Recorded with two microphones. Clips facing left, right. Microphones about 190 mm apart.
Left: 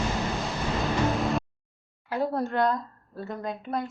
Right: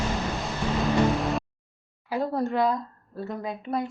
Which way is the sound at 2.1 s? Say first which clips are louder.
Right 1 dB; centre (ahead or behind).